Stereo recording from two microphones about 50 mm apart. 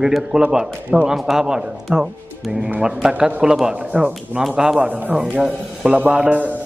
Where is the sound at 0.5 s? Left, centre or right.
Right.